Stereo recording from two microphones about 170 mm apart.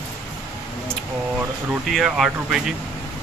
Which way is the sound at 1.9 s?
Centre (ahead or behind).